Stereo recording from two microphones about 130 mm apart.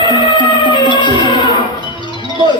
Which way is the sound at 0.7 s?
35° left (ahead or behind).